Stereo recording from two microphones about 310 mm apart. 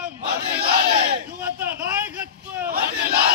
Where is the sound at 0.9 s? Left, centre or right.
Centre.